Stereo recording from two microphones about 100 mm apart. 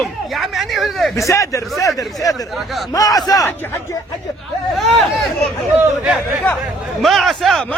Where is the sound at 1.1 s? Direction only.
30° left (ahead or behind).